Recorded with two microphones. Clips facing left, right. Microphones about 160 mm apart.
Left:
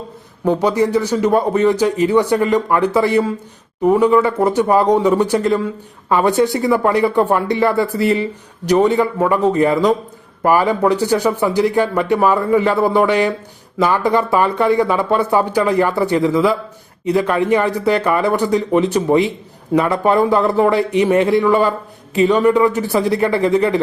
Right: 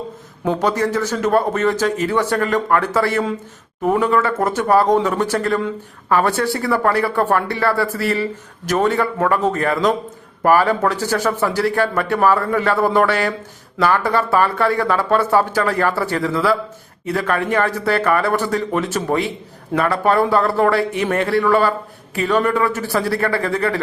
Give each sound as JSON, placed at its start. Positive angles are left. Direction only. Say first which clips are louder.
{"t": 0.4, "sound": "a man's voice", "louder": "left 3 dB", "side_deg": 15}